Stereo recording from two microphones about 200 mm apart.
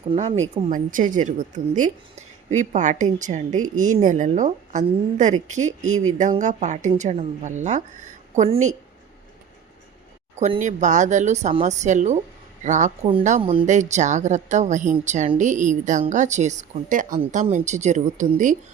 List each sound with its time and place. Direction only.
0.1 s speech: 30° right (ahead or behind)
0.5 s a woman's voice: 40° right (ahead or behind)
10.4 s a woman's voice: 35° right (ahead or behind)